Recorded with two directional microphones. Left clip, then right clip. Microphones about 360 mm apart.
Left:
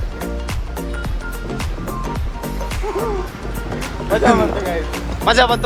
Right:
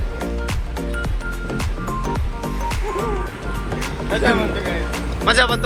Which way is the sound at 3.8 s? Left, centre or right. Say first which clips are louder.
Left 4 dB; centre.